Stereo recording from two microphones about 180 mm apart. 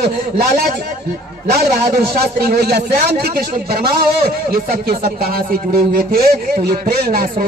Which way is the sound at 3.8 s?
55° right (ahead or behind).